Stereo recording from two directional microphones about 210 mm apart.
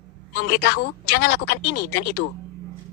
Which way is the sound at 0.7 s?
55° left (ahead or behind).